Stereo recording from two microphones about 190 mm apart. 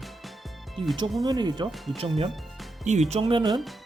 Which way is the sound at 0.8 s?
25° right (ahead or behind).